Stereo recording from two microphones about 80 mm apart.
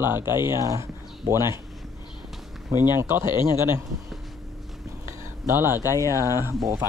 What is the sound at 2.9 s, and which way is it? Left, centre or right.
Speech, right.